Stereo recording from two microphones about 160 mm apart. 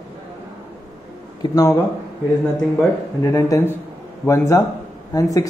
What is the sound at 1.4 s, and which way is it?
Speech, 20° left (ahead or behind).